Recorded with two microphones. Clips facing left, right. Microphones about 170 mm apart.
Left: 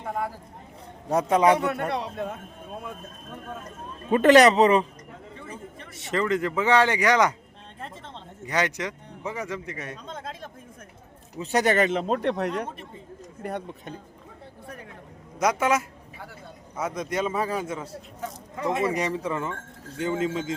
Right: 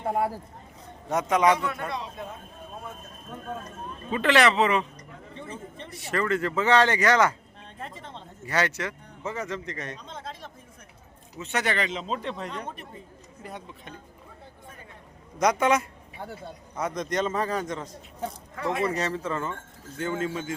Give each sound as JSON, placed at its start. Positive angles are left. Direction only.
{"t": 1.1, "sound": "speech", "side_deg": 30}
{"t": 1.5, "sound": "speech", "side_deg": 65}
{"t": 4.1, "sound": "speech", "side_deg": 45}
{"t": 6.0, "sound": "speech", "side_deg": 20}
{"t": 7.8, "sound": "a sound", "side_deg": 0}
{"t": 8.4, "sound": "speech", "side_deg": 15}
{"t": 10.1, "sound": "speech", "side_deg": 50}
{"t": 11.3, "sound": "speech", "side_deg": 35}
{"t": 15.4, "sound": "a man's voice", "side_deg": 5}
{"t": 18.5, "sound": "speech", "side_deg": 20}